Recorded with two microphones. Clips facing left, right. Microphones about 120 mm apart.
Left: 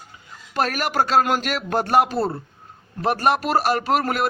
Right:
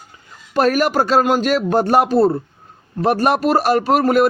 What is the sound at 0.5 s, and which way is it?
A man's voice, 40° right (ahead or behind).